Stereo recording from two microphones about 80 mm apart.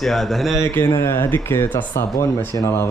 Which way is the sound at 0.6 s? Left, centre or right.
Left.